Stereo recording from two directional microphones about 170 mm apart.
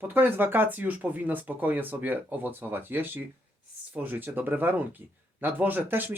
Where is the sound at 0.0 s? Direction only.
10° right (ahead or behind).